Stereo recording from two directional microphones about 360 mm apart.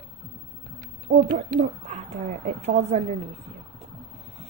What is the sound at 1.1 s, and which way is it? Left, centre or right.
Speech, right.